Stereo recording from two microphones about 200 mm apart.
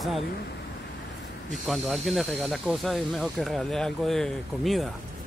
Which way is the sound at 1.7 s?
Centre (ahead or behind).